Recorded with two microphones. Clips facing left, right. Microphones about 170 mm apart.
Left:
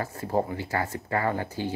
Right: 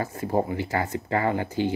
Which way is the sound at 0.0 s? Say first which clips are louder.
Right 2 dB; 20° right (ahead or behind).